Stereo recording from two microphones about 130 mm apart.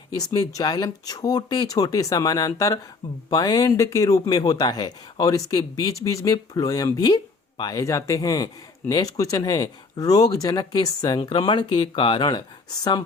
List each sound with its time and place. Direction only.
0.2 s speech: 30° left (ahead or behind)